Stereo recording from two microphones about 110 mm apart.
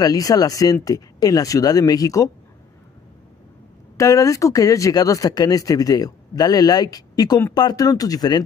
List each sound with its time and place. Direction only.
0.0 s speech: 35° left (ahead or behind)
3.9 s speech: 30° left (ahead or behind)